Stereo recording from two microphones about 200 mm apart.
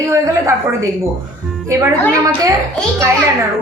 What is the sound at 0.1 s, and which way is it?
Speech, 15° right (ahead or behind).